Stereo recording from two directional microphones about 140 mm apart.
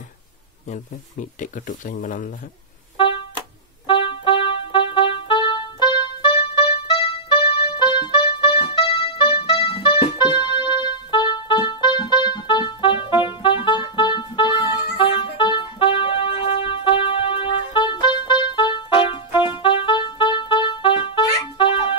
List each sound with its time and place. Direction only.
0.7 s speech: 65° left (ahead or behind)
3.8 s music: 35° left (ahead or behind)